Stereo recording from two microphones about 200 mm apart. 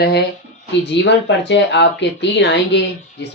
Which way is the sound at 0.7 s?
60° left (ahead or behind).